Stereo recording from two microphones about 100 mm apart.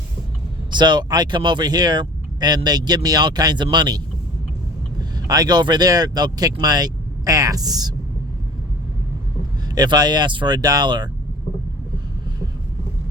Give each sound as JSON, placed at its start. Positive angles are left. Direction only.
{"t": 0.7, "sound": "speech", "side_deg": -50}
{"t": 9.6, "sound": "speech", "side_deg": -45}